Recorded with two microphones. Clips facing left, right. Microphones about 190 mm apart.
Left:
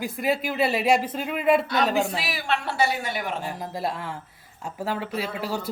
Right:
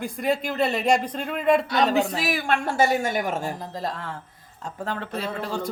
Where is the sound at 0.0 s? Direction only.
5° left (ahead or behind).